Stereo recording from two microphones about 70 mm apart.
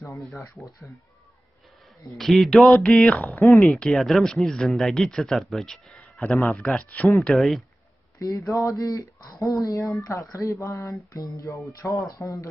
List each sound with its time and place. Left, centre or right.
0.6 s speech: centre
2.1 s speech: centre
6.6 s speech: centre
7.2 s speech: centre
8.2 s speech: left